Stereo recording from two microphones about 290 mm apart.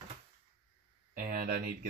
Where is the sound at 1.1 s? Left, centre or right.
Right.